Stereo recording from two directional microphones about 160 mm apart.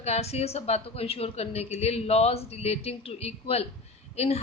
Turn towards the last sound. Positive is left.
turn(degrees=40)  # may be behind; listen again after turning